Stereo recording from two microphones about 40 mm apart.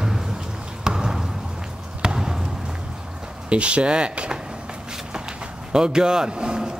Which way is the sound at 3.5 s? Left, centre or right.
Right.